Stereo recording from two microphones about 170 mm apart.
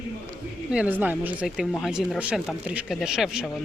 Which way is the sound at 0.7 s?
10° right (ahead or behind).